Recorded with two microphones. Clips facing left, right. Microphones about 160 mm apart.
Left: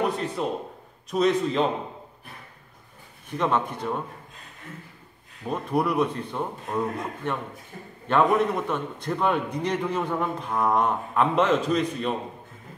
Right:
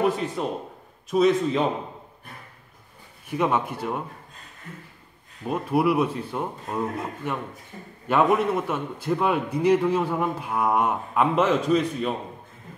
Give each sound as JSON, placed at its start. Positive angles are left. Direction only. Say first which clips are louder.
{"t": 0.1, "sound": "a man's voice", "louder": "even", "side_deg": 0}
{"t": 3.3, "sound": "a man's voice", "louder": "right 1 dB", "side_deg": -10}
{"t": 5.5, "sound": "a man's voice", "louder": "right 3 dB", "side_deg": -5}